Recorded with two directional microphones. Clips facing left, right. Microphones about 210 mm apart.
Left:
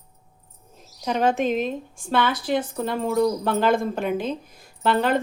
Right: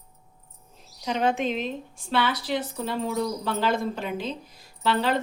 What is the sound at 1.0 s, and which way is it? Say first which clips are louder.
A woman's voice: left 3 dB; 45° left (ahead or behind).